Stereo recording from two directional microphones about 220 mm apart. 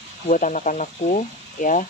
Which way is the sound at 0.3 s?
35° left (ahead or behind).